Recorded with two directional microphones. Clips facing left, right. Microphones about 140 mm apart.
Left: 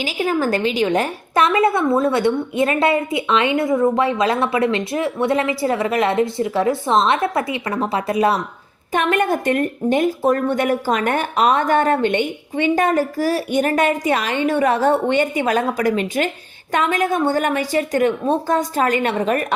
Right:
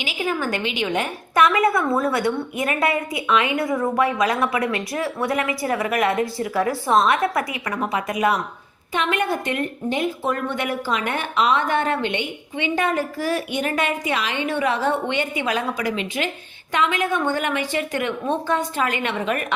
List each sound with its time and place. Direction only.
0.0 s a woman's voice: 35° left (ahead or behind)
8.9 s speech: 45° left (ahead or behind)